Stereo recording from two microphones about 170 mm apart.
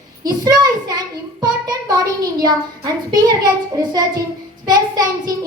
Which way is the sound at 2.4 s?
25° right (ahead or behind).